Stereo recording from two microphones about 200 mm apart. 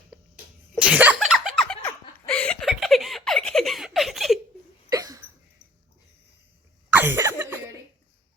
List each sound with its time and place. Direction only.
0.1 s sneeze: 5° right (ahead or behind)
2.3 s giggle: 5° left (ahead or behind)
4.9 s a sound: 15° right (ahead or behind)
6.9 s cough: 10° right (ahead or behind)